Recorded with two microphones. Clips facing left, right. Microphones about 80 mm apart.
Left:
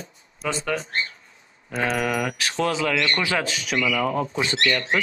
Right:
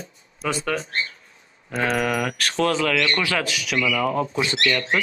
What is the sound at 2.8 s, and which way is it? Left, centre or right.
Speech, left.